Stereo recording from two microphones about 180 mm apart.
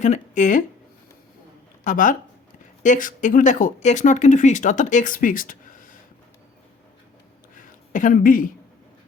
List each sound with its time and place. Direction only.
0.0 s speech: 40° left (ahead or behind)
1.8 s speech: 45° left (ahead or behind)
7.5 s a sound: 45° left (ahead or behind)